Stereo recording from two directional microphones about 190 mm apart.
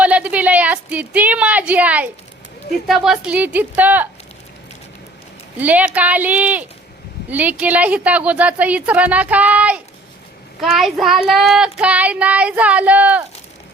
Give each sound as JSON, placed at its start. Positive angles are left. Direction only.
{"t": 0.0, "sound": "a woman's voice", "side_deg": -5}
{"t": 2.8, "sound": "child singing", "side_deg": 0}
{"t": 5.5, "sound": "child singing", "side_deg": -10}